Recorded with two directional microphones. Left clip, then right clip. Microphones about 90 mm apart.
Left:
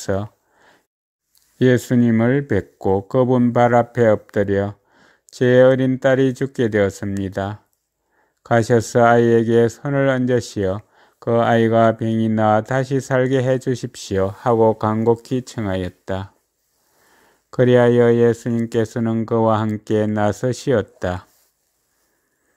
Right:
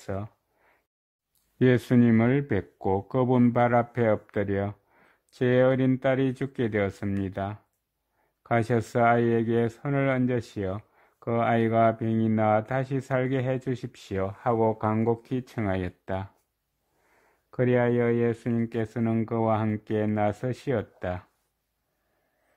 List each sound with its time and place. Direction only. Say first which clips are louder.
0.0 s a sound: left 12 dB; 35° left (ahead or behind)
1.6 s speech: left 6 dB; 10° left (ahead or behind)
17.5 s speech: left 10 dB; 30° left (ahead or behind)